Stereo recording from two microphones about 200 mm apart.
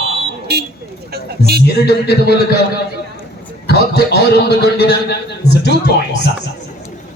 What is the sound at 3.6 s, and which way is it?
A man's voice, 55° left (ahead or behind).